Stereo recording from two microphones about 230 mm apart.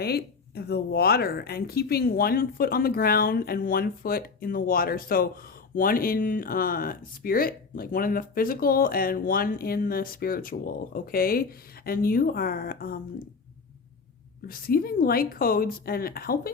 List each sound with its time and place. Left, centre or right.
0.0 s speech: left
14.4 s speech: left